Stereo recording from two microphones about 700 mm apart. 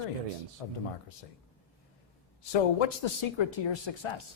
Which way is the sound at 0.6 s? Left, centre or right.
Left.